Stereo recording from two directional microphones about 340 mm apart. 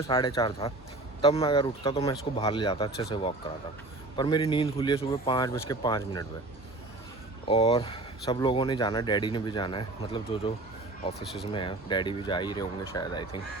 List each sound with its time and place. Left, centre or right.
0.1 s speech: centre
7.4 s speech: centre
11.5 s speech: centre